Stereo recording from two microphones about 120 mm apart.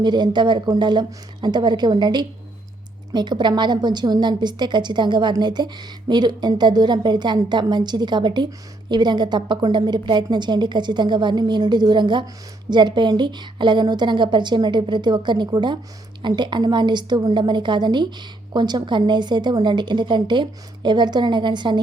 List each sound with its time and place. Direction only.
0.0 s a woman's voice: 40° right (ahead or behind)